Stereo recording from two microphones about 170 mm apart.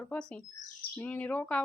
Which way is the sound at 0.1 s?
5° left (ahead or behind).